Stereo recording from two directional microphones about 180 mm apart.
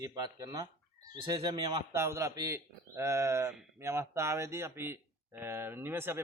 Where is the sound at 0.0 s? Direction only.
20° right (ahead or behind).